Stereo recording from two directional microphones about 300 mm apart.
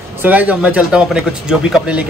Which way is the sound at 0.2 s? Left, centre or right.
Centre.